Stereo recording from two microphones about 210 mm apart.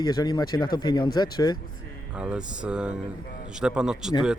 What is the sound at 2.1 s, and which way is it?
Speech, 5° right (ahead or behind).